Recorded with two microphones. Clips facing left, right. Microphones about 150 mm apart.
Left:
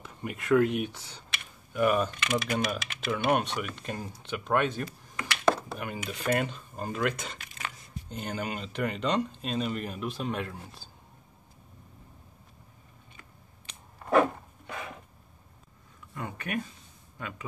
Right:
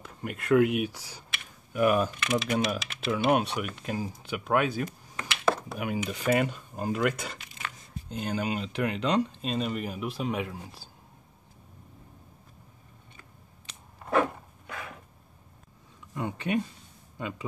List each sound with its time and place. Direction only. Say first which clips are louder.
0.0 s speech: right 1 dB; centre (ahead or behind)
14.2 s a sound: left 2 dB; 20° left (ahead or behind)
16.2 s speech: right 5 dB; 25° right (ahead or behind)